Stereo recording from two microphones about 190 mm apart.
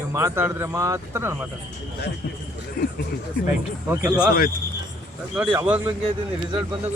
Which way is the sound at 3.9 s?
15° right (ahead or behind).